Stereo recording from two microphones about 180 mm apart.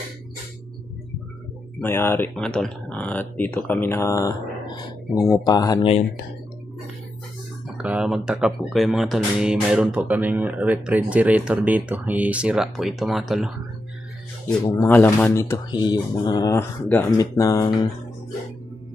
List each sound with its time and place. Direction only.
1.8 s speech: 15° left (ahead or behind)
7.7 s speech: 5° right (ahead or behind)
14.6 s speech: 20° left (ahead or behind)
15.7 s speech: 25° left (ahead or behind)